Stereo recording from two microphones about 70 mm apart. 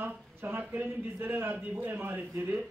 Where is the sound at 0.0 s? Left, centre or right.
Right.